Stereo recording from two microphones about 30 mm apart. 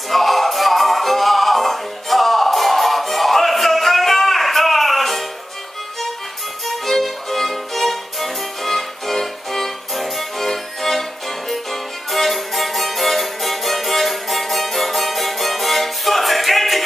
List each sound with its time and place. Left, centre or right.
0.1 s music: centre
6.6 s violin: centre